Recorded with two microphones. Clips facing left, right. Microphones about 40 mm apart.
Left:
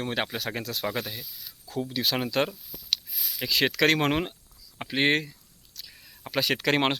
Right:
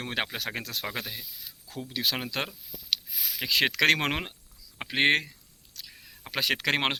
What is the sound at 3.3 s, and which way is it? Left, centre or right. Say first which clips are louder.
Speech: even; right.